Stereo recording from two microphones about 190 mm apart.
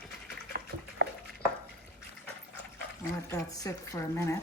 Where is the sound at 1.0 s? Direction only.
70° right (ahead or behind).